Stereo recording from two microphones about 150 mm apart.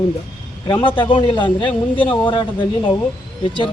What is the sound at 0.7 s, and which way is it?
A man's voice, 35° left (ahead or behind).